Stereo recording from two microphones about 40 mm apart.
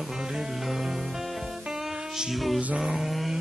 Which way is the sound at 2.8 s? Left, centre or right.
Centre.